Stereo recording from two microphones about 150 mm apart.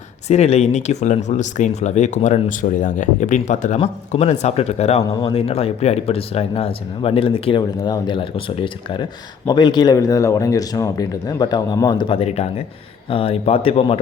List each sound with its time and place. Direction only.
0.3 s speech: 45° left (ahead or behind)